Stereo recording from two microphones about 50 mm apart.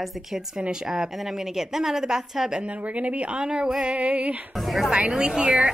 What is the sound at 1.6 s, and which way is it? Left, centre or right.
A woman's voice, centre.